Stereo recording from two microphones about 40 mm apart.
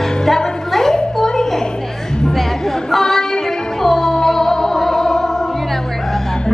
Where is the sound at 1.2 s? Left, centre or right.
Centre.